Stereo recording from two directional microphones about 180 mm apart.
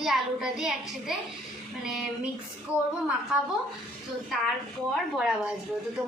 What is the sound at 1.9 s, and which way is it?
Speech, 5° right (ahead or behind).